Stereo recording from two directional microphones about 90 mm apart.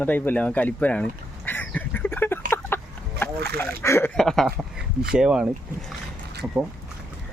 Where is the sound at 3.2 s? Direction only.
30° left (ahead or behind).